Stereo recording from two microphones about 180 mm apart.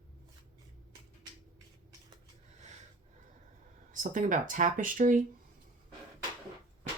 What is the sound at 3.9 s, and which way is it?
Speech, 45° right (ahead or behind).